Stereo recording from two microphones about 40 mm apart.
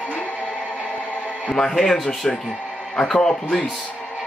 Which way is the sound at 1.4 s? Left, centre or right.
Centre.